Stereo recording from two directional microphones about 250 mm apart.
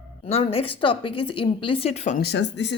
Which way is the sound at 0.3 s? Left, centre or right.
Left.